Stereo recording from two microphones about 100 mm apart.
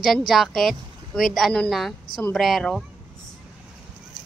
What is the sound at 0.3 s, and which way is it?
A woman's voice, centre (ahead or behind).